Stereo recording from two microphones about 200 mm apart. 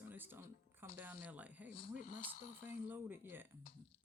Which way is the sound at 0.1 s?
10° right (ahead or behind).